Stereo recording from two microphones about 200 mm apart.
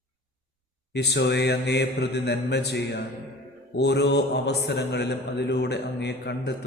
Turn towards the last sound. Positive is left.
turn(degrees=60)  # may be behind; listen again after turning